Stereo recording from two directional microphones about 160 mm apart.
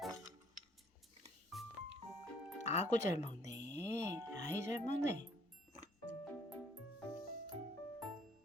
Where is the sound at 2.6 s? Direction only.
45° left (ahead or behind).